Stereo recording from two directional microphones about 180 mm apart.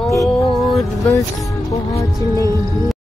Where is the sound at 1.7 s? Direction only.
15° left (ahead or behind).